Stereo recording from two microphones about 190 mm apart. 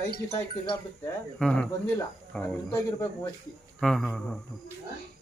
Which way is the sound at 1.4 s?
5° left (ahead or behind).